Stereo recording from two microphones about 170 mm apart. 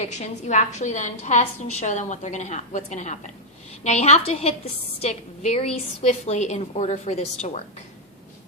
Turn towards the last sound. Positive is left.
turn(degrees=40)  # may be behind; listen again after turning